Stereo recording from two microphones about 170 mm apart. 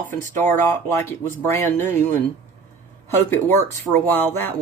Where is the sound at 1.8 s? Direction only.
45° right (ahead or behind).